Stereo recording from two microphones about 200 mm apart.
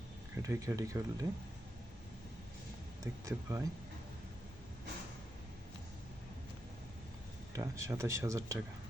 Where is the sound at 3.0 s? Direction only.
15° right (ahead or behind).